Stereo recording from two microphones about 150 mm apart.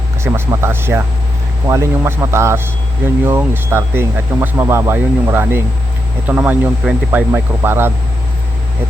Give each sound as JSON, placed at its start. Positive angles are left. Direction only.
{"t": 0.2, "sound": "speech", "side_deg": -15}